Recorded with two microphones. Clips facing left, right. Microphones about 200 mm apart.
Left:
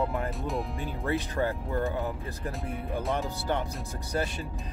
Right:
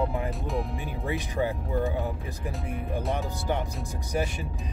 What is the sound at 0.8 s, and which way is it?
Speech, 15° right (ahead or behind).